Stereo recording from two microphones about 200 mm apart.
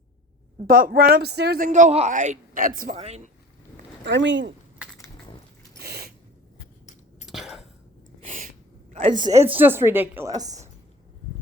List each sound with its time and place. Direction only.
0.7 s speech: 45° right (ahead or behind)
2.9 s a man's voice: 30° right (ahead or behind)
4.0 s speech: 65° right (ahead or behind)
4.8 s crushing: 5° right (ahead or behind)
5.8 s a sound: 50° right (ahead or behind)
7.3 s a sound: centre (ahead or behind)
8.2 s gasp: 40° right (ahead or behind)
8.9 s a woman's voice: 30° right (ahead or behind)
9.5 s a woman's voice: 10° right (ahead or behind)